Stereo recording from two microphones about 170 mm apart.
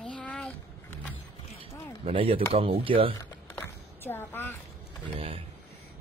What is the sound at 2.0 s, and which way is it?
Speech, 35° right (ahead or behind).